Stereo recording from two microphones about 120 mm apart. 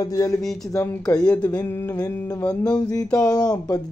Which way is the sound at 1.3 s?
35° left (ahead or behind).